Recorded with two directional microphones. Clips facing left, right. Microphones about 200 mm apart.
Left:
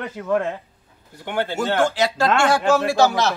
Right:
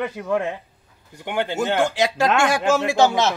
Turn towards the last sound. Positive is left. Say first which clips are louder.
# even
turn(degrees=-20)  # may be behind; listen again after turning